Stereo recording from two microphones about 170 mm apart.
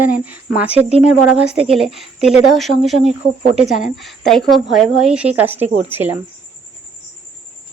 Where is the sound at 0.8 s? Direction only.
35° right (ahead or behind).